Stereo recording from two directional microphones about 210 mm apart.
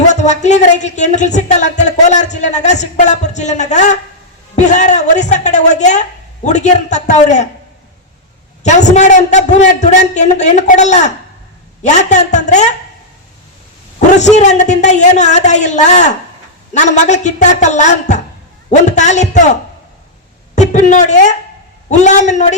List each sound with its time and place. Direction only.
0.1 s speech: 35° left (ahead or behind)
8.6 s speech: 35° left (ahead or behind)
14.2 s speech: 35° left (ahead or behind)
20.6 s speech: 35° left (ahead or behind)